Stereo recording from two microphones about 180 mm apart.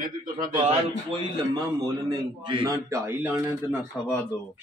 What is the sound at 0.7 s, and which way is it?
Speech, 35° right (ahead or behind).